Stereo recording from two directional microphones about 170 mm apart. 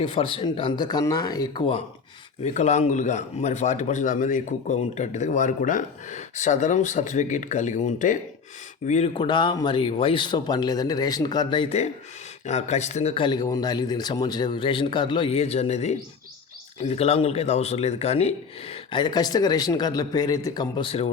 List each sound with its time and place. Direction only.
0.0 s speech: 30° left (ahead or behind)
2.4 s speech: 40° left (ahead or behind)
9.1 s speech: 25° left (ahead or behind)